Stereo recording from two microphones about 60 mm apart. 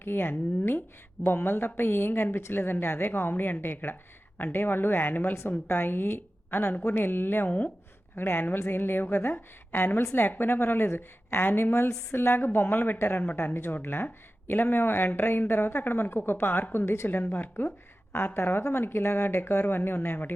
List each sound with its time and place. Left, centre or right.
0.0 s a woman's voice: left
17.2 s a woman's voice: left